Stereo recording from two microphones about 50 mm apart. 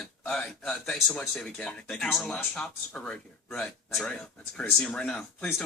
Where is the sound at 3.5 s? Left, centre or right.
Centre.